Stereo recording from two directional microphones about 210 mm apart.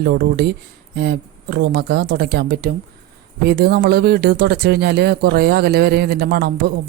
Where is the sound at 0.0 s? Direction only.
50° right (ahead or behind).